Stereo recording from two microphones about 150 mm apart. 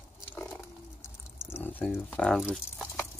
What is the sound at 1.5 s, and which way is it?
Speech, 15° left (ahead or behind).